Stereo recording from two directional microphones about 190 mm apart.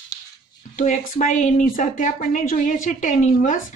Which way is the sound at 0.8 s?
40° left (ahead or behind).